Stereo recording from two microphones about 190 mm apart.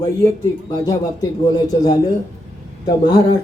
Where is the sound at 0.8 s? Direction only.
20° left (ahead or behind).